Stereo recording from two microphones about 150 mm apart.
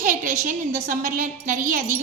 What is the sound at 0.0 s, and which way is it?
A woman's voice, 65° right (ahead or behind).